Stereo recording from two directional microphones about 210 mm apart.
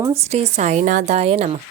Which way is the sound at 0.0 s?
30° right (ahead or behind).